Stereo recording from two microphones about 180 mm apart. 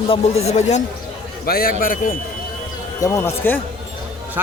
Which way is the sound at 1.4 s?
55° left (ahead or behind).